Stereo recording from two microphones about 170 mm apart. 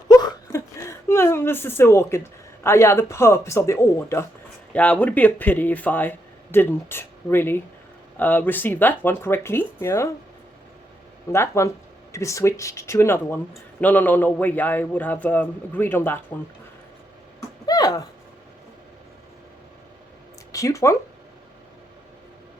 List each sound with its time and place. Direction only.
0.1 s a man's voice: 20° left (ahead or behind)
11.3 s a man's voice: 15° left (ahead or behind)
17.7 s a sound: 20° left (ahead or behind)
20.5 s speech: 20° left (ahead or behind)